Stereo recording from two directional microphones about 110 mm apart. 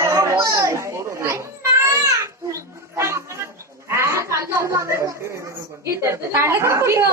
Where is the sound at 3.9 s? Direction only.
25° right (ahead or behind).